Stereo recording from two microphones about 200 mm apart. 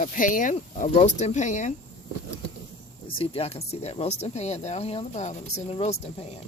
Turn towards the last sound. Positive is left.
turn(degrees=30)  # may be behind; listen again after turning